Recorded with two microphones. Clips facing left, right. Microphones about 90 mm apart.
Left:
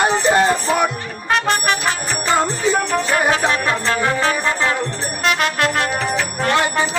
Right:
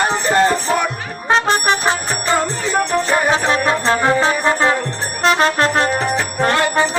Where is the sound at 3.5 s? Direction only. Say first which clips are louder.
Right 3 dB; 25° right (ahead or behind).